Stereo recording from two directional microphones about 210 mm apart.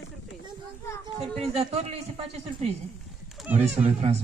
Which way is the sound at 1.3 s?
30° right (ahead or behind).